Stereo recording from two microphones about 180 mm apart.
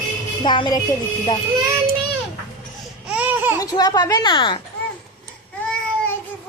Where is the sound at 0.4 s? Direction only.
25° left (ahead or behind).